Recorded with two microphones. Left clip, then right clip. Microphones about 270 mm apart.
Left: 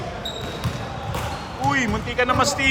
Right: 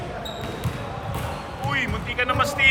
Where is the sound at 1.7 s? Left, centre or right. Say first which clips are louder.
Even; left.